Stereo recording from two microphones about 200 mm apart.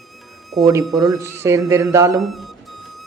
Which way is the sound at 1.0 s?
15° right (ahead or behind).